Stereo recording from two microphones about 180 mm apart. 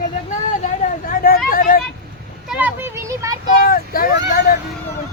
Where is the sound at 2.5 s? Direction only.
10° right (ahead or behind).